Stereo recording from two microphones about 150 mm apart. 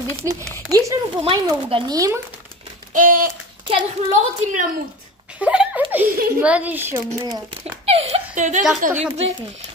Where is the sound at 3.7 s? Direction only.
50° right (ahead or behind).